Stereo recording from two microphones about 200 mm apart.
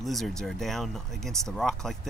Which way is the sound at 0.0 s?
Centre (ahead or behind).